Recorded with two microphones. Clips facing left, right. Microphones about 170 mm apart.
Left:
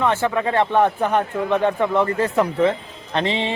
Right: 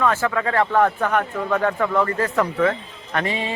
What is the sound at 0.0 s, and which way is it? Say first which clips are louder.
Speech: left 1 dB; 25° left (ahead or behind).